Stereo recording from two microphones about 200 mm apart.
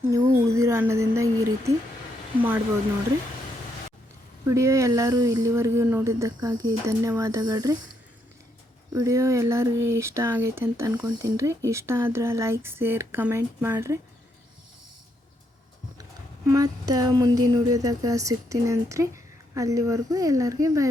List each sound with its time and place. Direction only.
0.1 s speech: 15° right (ahead or behind)
4.4 s speech: 15° right (ahead or behind)
8.9 s speech: 15° right (ahead or behind)
16.5 s speech: 20° right (ahead or behind)